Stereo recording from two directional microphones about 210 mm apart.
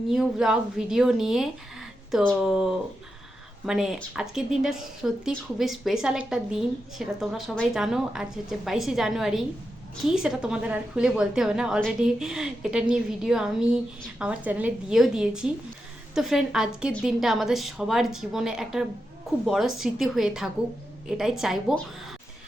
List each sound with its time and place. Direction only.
0.1 s speech: centre (ahead or behind)